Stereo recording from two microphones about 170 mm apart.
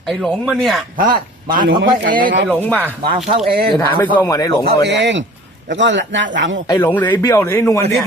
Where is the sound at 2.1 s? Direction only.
55° right (ahead or behind).